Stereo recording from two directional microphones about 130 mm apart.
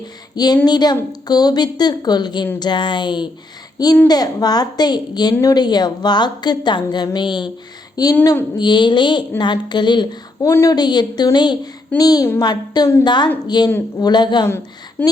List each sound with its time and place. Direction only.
0.3 s a woman's voice: 30° left (ahead or behind)
8.2 s a woman's voice: 25° left (ahead or behind)
10.4 s a woman's voice: 20° left (ahead or behind)
14.4 s a woman's voice: 20° left (ahead or behind)